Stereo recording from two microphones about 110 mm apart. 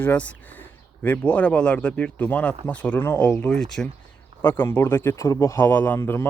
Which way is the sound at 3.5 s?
5° left (ahead or behind).